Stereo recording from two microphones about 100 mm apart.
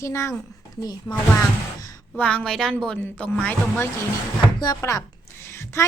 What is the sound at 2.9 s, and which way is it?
Speech, 20° left (ahead or behind).